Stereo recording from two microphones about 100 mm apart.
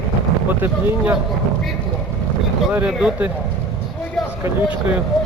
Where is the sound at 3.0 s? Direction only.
15° right (ahead or behind).